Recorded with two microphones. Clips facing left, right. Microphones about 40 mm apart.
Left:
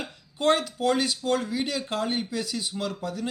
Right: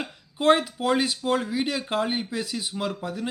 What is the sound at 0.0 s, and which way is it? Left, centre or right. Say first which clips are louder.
A man's voice: right 2 dB; centre.